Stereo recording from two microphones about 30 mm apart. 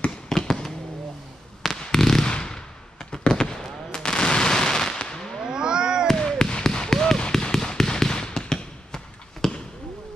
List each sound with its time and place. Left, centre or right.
0.3 s tap: centre
1.6 s fireworks: centre
2.4 s machine gun: left
5.4 s a sound: right
6.2 s a sound: left
7.2 s fireworks: left
9.4 s basketball bounce: centre